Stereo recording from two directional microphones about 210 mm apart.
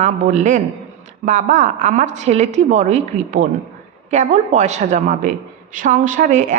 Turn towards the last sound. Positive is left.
turn(degrees=-35)  # may be behind; listen again after turning